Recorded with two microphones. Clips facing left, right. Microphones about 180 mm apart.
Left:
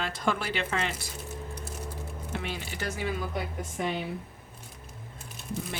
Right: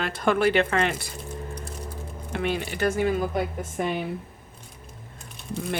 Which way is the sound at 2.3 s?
60° right (ahead or behind).